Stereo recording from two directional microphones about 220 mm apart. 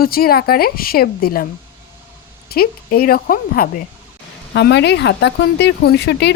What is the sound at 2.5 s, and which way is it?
Speech, 45° left (ahead or behind).